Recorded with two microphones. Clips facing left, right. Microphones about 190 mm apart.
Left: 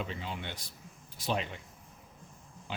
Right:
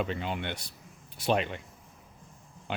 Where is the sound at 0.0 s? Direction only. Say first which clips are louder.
Right 6 dB; 65° right (ahead or behind).